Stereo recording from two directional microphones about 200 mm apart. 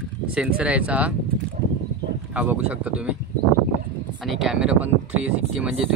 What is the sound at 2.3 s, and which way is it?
Speech, 5° right (ahead or behind).